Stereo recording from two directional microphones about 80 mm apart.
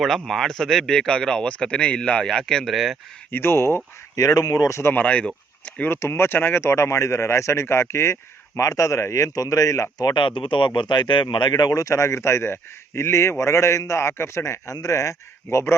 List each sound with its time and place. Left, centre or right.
0.3 s speech: centre
3.3 s speech: left
4.1 s speech: left
4.8 s speech: left
5.9 s speech: left
10.2 s speech: left